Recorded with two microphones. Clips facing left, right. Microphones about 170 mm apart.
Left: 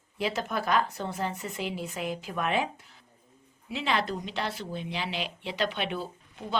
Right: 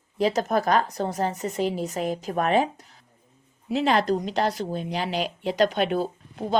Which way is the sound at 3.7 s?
40° right (ahead or behind).